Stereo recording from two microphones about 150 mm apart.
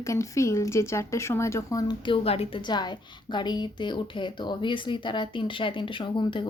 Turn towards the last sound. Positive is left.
turn(degrees=30)  # may be behind; listen again after turning